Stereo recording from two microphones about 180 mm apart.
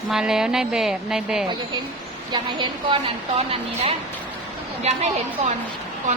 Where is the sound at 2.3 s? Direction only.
25° right (ahead or behind).